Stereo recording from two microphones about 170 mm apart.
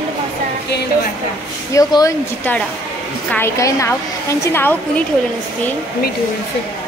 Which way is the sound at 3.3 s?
15° left (ahead or behind).